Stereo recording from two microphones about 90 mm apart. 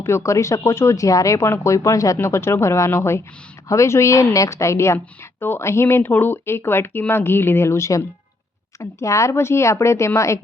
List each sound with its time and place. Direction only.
0.0 s speech: 30° left (ahead or behind)